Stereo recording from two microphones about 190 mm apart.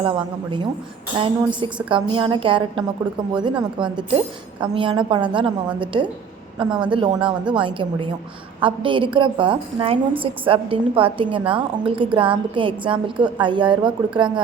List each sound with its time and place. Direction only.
0.0 s a woman's voice: 25° right (ahead or behind)